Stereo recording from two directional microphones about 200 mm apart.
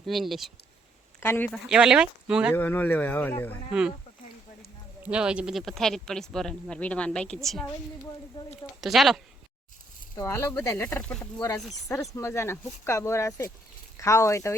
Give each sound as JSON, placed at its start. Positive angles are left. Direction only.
{"t": 0.0, "sound": "speech", "side_deg": 0}
{"t": 1.2, "sound": "speech", "side_deg": 10}
{"t": 1.7, "sound": "speech", "side_deg": -5}
{"t": 2.6, "sound": "speech", "side_deg": 10}
{"t": 3.7, "sound": "speech", "side_deg": -5}
{"t": 5.0, "sound": "speech", "side_deg": -5}
{"t": 8.8, "sound": "speech", "side_deg": 0}
{"t": 10.2, "sound": "speech", "side_deg": 15}